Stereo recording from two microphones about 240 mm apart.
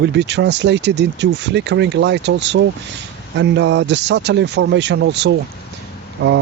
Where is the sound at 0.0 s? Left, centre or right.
Right.